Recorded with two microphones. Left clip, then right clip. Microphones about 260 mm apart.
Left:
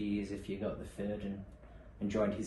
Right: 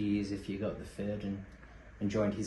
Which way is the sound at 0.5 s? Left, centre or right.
Right.